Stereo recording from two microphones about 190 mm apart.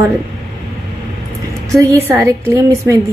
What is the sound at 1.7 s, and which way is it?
Speech, 15° right (ahead or behind).